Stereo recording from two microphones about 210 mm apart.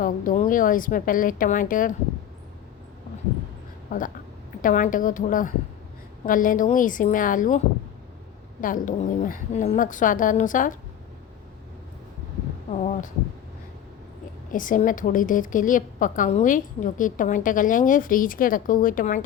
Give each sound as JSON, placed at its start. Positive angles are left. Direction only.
{"t": 0.0, "sound": "a woman's voice", "side_deg": 40}
{"t": 3.8, "sound": "a woman's voice", "side_deg": 40}
{"t": 8.6, "sound": "a woman's voice", "side_deg": 40}
{"t": 12.8, "sound": "a woman's voice", "side_deg": 35}
{"t": 14.5, "sound": "a woman's voice", "side_deg": 40}